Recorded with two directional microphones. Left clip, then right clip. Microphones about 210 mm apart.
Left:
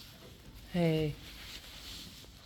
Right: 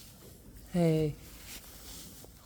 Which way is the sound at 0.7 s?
25° right (ahead or behind).